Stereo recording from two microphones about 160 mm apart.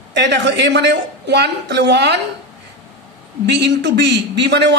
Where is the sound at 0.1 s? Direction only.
90° right.